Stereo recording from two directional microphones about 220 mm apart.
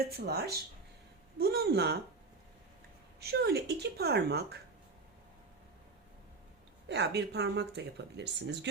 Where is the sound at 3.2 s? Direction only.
45° right (ahead or behind).